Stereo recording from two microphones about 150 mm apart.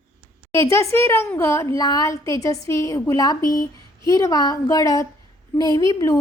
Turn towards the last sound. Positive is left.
turn(degrees=20)  # may be behind; listen again after turning